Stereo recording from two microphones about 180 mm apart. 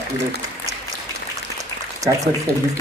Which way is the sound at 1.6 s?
20° right (ahead or behind).